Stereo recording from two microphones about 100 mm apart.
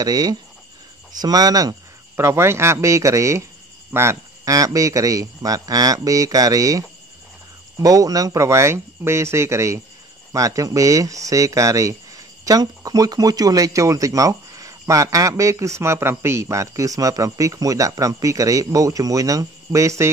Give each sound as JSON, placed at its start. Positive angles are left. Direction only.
{"t": 0.0, "sound": "speech", "side_deg": -40}
{"t": 2.1, "sound": "speech", "side_deg": -25}
{"t": 7.8, "sound": "speech", "side_deg": -35}